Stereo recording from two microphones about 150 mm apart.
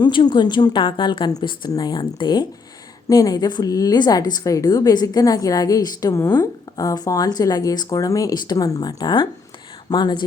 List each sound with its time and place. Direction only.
0.0 s a woman's voice: 30° left (ahead or behind)